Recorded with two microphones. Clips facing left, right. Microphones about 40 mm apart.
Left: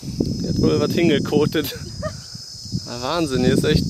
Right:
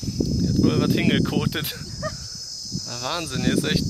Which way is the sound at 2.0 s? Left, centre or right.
Left.